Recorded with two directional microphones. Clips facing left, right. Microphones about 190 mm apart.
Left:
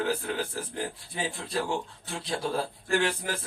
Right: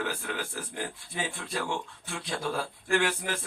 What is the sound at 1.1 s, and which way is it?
A man's voice, 35° left (ahead or behind).